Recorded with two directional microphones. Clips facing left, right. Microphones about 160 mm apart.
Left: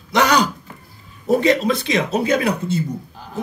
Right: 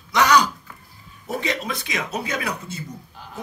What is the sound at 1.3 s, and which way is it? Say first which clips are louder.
Speech: left 11 dB; 35° left (ahead or behind).